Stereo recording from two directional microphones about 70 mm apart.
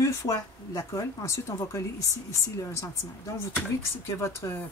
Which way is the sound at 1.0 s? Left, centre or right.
Left.